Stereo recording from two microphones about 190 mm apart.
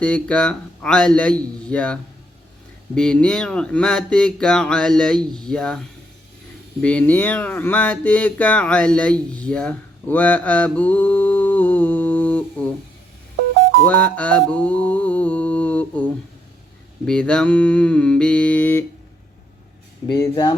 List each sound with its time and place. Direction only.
0.0 s speech: 5° left (ahead or behind)
6.8 s a sound: 5° left (ahead or behind)
13.7 s music: 10° left (ahead or behind)
17.1 s speech: 5° left (ahead or behind)
20.1 s speech: 20° left (ahead or behind)